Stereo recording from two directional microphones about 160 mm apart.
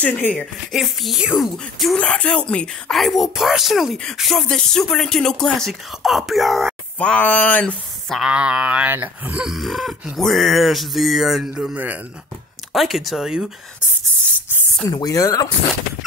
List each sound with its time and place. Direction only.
0.0 s speech: 10° left (ahead or behind)
8.2 s speech: 5° right (ahead or behind)
14.9 s speech: 25° left (ahead or behind)